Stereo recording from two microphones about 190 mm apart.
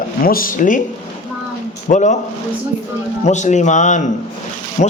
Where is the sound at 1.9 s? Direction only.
40° left (ahead or behind).